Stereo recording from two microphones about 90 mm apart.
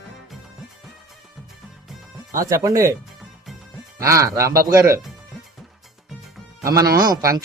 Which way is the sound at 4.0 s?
35° right (ahead or behind).